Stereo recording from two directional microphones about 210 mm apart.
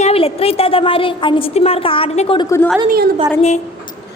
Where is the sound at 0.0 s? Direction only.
30° left (ahead or behind).